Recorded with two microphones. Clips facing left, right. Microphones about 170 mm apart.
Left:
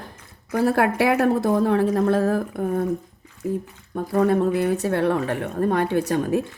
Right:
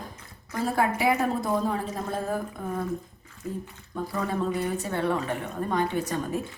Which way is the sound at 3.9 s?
60° left (ahead or behind).